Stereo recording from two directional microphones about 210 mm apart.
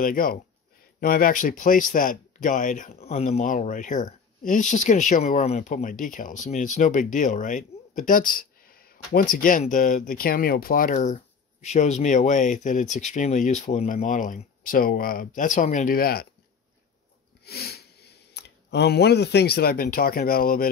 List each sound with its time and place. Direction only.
0.0 s speech: 40° left (ahead or behind)
17.5 s speech: 50° left (ahead or behind)